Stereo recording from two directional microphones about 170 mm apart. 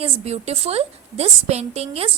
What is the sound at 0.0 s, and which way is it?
Speech, 35° right (ahead or behind).